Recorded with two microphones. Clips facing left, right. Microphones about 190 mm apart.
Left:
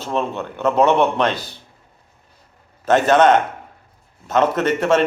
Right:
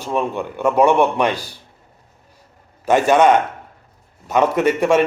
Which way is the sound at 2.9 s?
10° right (ahead or behind).